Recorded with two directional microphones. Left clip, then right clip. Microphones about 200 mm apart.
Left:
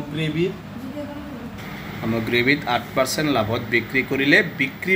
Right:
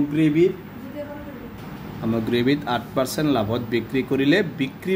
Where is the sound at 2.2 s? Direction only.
30° right (ahead or behind).